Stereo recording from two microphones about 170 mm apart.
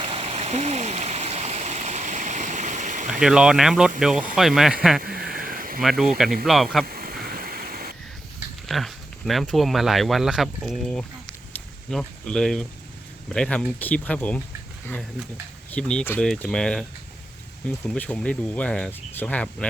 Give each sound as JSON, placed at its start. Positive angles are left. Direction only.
{"t": 0.0, "sound": "stream", "side_deg": -30}
{"t": 3.1, "sound": "speech", "side_deg": -5}
{"t": 5.0, "sound": "a sound", "side_deg": -60}
{"t": 5.8, "sound": "speech", "side_deg": 0}
{"t": 6.8, "sound": "a sound", "side_deg": -60}
{"t": 8.6, "sound": "speech", "side_deg": 0}
{"t": 15.7, "sound": "speech", "side_deg": 5}